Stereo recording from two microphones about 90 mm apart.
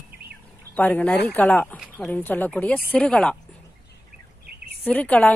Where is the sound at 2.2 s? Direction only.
20° left (ahead or behind).